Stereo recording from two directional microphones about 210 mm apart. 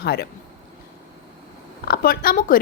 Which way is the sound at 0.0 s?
50° left (ahead or behind).